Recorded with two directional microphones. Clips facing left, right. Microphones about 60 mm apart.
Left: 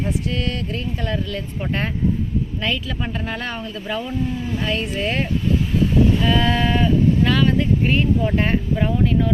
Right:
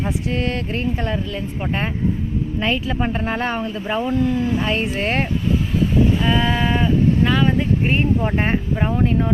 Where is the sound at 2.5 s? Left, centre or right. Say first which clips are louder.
Right 7 dB; right.